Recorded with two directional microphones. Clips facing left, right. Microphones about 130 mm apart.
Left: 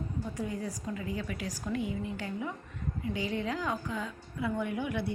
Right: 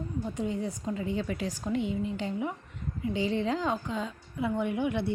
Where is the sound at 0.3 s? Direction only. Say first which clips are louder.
Right 4 dB; 25° right (ahead or behind).